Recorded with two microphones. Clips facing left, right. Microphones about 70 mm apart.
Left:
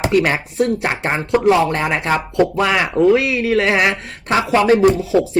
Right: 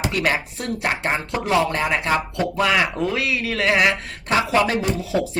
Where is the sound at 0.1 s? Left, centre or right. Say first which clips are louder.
Left 6 dB; left.